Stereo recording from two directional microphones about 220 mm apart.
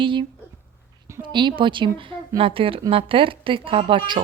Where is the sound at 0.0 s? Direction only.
20° right (ahead or behind).